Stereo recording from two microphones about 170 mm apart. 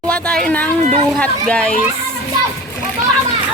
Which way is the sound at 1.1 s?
5° left (ahead or behind).